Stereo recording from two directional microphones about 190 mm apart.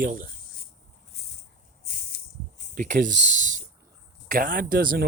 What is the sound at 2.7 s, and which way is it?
Speech, 45° right (ahead or behind).